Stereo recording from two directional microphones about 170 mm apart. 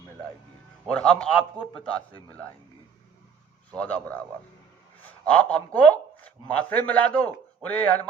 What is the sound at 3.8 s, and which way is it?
A man's voice, 10° left (ahead or behind).